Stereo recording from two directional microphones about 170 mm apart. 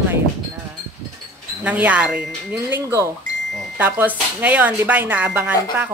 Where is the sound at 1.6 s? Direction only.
10° right (ahead or behind).